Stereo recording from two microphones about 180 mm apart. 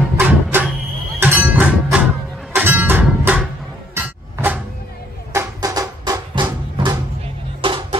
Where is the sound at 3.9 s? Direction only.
10° right (ahead or behind); by 8.0 s 30° right (ahead or behind).